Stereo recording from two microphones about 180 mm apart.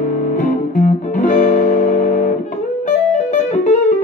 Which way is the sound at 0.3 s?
45° left (ahead or behind).